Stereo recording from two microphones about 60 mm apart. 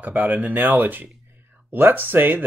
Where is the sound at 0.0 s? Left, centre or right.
Right.